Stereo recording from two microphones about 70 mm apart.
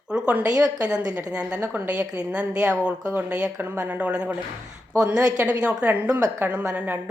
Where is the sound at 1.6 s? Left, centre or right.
Right.